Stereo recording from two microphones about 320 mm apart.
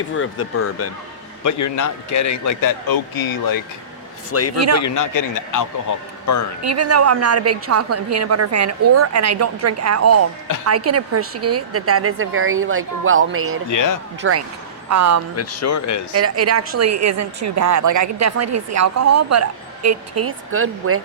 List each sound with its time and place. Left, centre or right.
0.2 s speech: left
1.5 s a man's voice: left
4.3 s a man's voice: left
6.6 s a woman's voice: right
13.7 s a man's voice: left
14.2 s a woman's voice: right
14.8 s speech: right
15.4 s a man's voice: left
16.1 s a woman's voice: right